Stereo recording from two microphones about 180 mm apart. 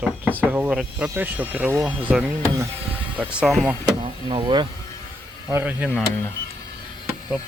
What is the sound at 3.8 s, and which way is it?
Speech, 25° right (ahead or behind).